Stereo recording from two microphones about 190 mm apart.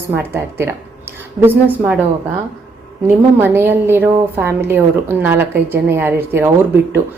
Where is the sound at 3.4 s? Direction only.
10° right (ahead or behind).